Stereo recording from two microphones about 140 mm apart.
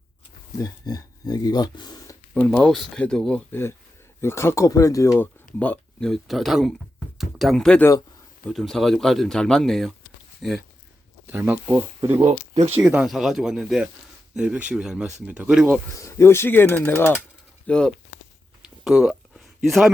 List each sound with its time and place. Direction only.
0.6 s speech: 25° left (ahead or behind)
2.3 s speech: 10° left (ahead or behind)
4.2 s speech: 15° left (ahead or behind); by 10.6 s centre (ahead or behind)
11.3 s speech: 15° right (ahead or behind)
12.2 s speech: 50° right (ahead or behind)
12.9 s speech: 5° right (ahead or behind)
16.0 s speech: 20° left (ahead or behind)
18.6 s a sound: 5° right (ahead or behind)
19.6 s speech: centre (ahead or behind)